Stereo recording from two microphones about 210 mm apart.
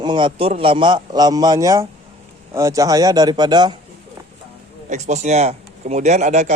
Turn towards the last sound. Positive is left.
turn(degrees=-35)  # may be behind; listen again after turning